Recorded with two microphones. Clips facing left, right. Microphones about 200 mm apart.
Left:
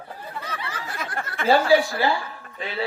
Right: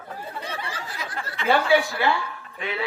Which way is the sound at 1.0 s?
50° left (ahead or behind).